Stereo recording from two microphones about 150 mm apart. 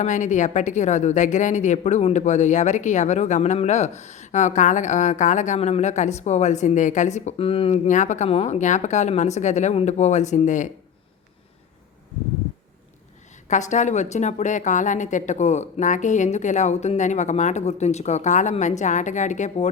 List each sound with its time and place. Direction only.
0.0 s a woman's voice: 55° left (ahead or behind); by 7.8 s 40° left (ahead or behind)
7.9 s a woman's voice: 55° left (ahead or behind)
13.5 s a woman's voice: 55° left (ahead or behind)